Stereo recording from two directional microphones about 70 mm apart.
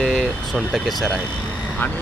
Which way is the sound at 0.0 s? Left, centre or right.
Centre.